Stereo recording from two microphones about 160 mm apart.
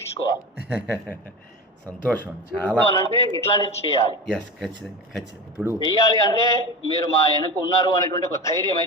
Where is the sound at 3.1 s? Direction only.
30° right (ahead or behind).